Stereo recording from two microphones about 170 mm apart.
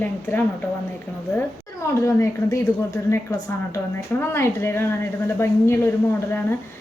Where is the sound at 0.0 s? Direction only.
10° left (ahead or behind).